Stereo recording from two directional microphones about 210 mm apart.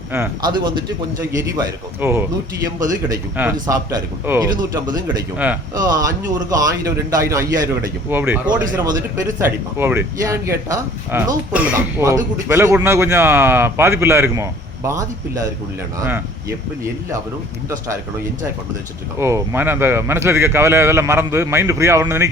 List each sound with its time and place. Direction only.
0.1 s speech: 15° right (ahead or behind)
5.7 s speech: 15° right (ahead or behind)
19.2 s speech: 10° right (ahead or behind)